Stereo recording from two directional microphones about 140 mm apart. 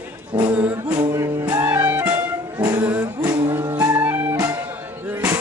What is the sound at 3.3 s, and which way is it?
Music, 15° right (ahead or behind).